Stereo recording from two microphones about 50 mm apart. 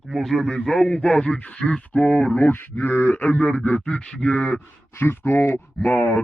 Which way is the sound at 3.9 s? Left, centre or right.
Centre.